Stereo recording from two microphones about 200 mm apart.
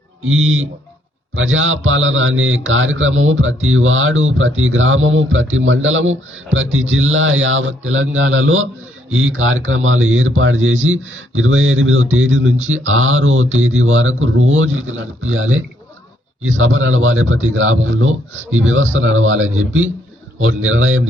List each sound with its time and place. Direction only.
0.3 s speech: 80° right
12.6 s a man's voice: 85° right